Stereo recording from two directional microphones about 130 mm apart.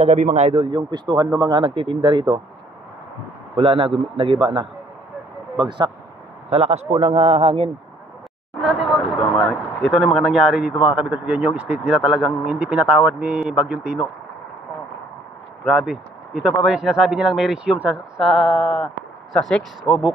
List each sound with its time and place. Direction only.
0.0 s a man's voice: 60° right (ahead or behind)
0.7 s speech: 35° right (ahead or behind)
3.5 s speech: 45° right (ahead or behind)
6.5 s speech: 55° right (ahead or behind)
8.5 s vehicle: centre (ahead or behind)
9.5 s speech: 5° left (ahead or behind)
15.6 s a man's voice: 5° right (ahead or behind)
18.2 s a man's voice: 5° left (ahead or behind)
19.9 s speech: 45° left (ahead or behind)